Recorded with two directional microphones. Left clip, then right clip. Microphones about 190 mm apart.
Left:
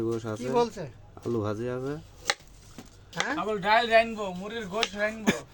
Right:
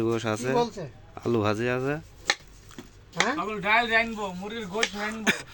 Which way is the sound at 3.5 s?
65° left (ahead or behind).